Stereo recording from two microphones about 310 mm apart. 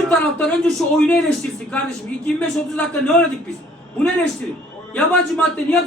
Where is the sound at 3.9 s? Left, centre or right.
Centre.